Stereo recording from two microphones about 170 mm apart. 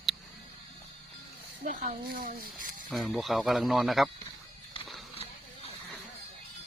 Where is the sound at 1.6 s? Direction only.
45° right (ahead or behind).